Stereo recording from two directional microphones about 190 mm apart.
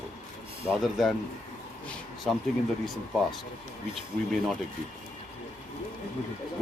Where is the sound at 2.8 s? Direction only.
Centre (ahead or behind).